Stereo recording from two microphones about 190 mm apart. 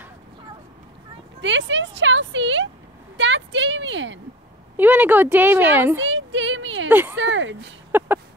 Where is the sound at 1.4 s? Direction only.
75° right (ahead or behind).